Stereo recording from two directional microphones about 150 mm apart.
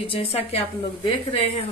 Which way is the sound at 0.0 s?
40° left (ahead or behind).